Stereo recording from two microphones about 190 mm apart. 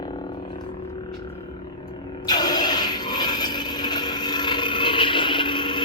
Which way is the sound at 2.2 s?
20° left (ahead or behind).